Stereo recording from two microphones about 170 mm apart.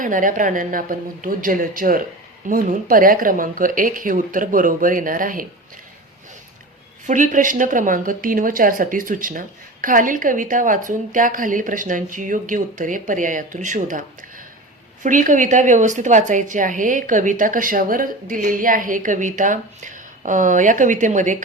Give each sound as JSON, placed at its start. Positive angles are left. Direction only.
{"t": 0.0, "sound": "speech", "side_deg": -50}
{"t": 7.1, "sound": "speech", "side_deg": -50}